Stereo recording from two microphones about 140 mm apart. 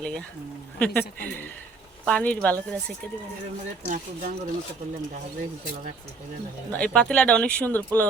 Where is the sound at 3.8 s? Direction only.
80° right.